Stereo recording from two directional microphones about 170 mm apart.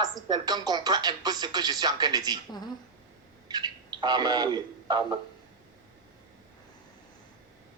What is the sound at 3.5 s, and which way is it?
Speech, 25° right (ahead or behind).